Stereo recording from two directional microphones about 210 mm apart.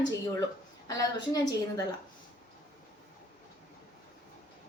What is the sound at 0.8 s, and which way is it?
Speech, 15° left (ahead or behind).